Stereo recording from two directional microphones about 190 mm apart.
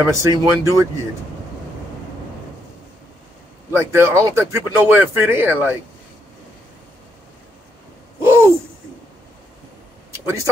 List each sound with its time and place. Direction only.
0.1 s speech: 15° right (ahead or behind)
3.7 s speech: 15° right (ahead or behind)
8.2 s a sound: 15° right (ahead or behind)
10.1 s speech: 15° right (ahead or behind)